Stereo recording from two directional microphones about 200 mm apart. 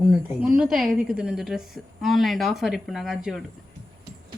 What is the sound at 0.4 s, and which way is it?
A woman's voice, 5° right (ahead or behind).